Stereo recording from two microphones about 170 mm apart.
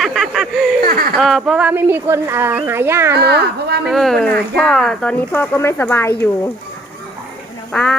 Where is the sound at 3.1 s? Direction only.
75° right (ahead or behind).